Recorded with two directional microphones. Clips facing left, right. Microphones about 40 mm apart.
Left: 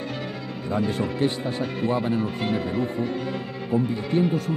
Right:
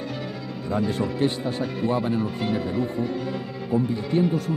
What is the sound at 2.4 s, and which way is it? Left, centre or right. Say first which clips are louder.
Music: even; left.